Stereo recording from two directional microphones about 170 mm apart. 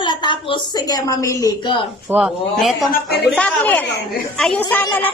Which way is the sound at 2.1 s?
5° right (ahead or behind).